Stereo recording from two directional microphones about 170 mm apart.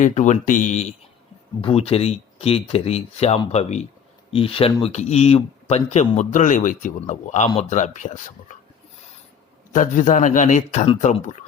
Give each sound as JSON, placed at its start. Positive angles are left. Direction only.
{"t": 0.0, "sound": "a man's voice", "side_deg": 45}
{"t": 9.7, "sound": "a man's voice", "side_deg": 50}